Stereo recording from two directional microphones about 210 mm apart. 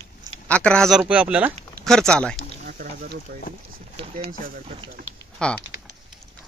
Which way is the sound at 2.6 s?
45° right (ahead or behind).